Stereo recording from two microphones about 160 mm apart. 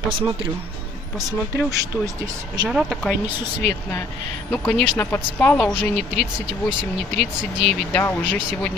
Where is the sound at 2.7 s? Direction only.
Centre (ahead or behind).